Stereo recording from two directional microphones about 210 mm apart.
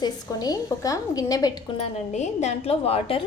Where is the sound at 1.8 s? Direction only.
35° left (ahead or behind).